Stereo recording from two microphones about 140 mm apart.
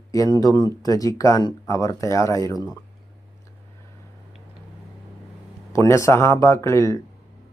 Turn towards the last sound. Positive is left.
turn(degrees=20)  # may be behind; listen again after turning